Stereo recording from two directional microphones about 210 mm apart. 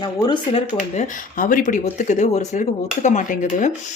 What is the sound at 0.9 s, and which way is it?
Speech, 40° left (ahead or behind).